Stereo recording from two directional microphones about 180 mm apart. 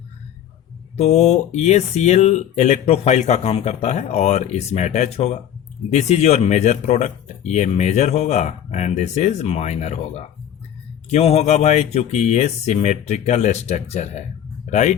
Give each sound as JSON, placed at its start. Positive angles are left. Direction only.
{"t": 0.9, "sound": "speech", "side_deg": 35}